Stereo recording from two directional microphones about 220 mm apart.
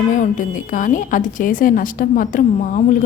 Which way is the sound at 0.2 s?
35° left (ahead or behind).